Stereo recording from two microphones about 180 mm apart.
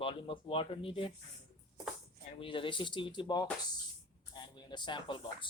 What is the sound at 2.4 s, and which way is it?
Speech, 30° left (ahead or behind).